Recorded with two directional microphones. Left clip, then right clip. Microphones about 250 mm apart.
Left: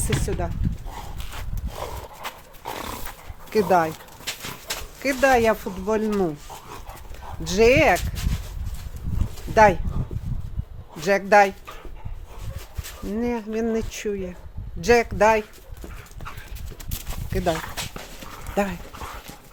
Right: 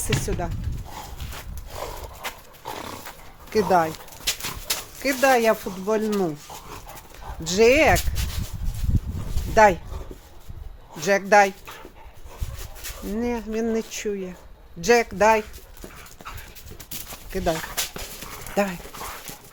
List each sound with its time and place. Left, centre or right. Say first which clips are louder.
0.0 s speech: even; centre
1.2 s walk: left 1 dB; centre
2.6 s dog: left 2 dB; left
3.5 s speech: even; centre
4.7 s dog: right 3 dB; centre
5.2 s speech: even; centre
6.1 s dog: left 1 dB; centre
7.4 s speech: even; centre
9.3 s a sound: even; centre
10.9 s speech: even; centre
13.1 s speech: left 1 dB; centre
17.3 s speech: left 1 dB; centre
17.7 s dog: right 3 dB; right
18.5 s speech: right 1 dB; centre